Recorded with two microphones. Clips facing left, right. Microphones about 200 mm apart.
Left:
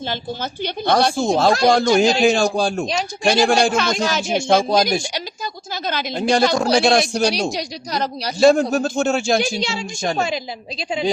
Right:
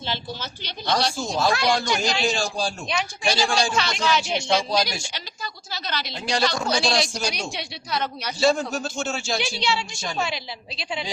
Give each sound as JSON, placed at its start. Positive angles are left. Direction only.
{"t": 0.1, "sound": "a woman's voice", "side_deg": 55}
{"t": 7.5, "sound": "a woman's voice", "side_deg": 40}
{"t": 8.7, "sound": "a woman's voice", "side_deg": 55}